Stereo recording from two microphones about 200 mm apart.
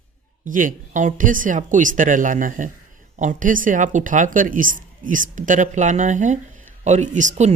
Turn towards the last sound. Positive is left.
turn(degrees=-35)  # may be behind; listen again after turning